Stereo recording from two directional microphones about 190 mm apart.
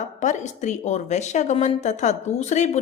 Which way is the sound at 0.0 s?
40° left (ahead or behind).